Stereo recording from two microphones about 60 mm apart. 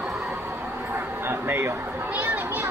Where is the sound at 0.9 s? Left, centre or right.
Right.